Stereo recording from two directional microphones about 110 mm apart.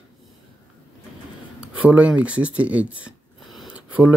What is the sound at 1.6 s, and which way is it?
Speech, 10° right (ahead or behind).